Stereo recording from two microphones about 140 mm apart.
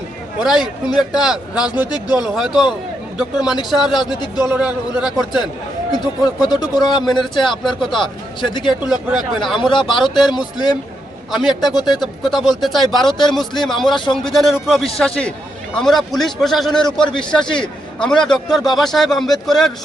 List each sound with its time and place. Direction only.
0.3 s a man's voice: 5° right (ahead or behind)
1.9 s a man's voice: 30° left (ahead or behind)
2.2 s a man's voice: 5° right (ahead or behind)
6.5 s a man's voice: 30° left (ahead or behind)
7.6 s a man's voice: centre (ahead or behind)
8.4 s speech: 35° left (ahead or behind)
8.9 s a man's voice: centre (ahead or behind)
9.6 s speech: 35° left (ahead or behind)
9.8 s a man's voice: centre (ahead or behind)
13.9 s speech: 35° left (ahead or behind)
14.2 s a man's voice: centre (ahead or behind)
16.8 s speech: 35° left (ahead or behind)
18.0 s a man's voice: 5° left (ahead or behind)